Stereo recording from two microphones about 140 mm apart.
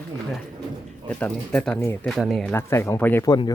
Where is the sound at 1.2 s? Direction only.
10° left (ahead or behind).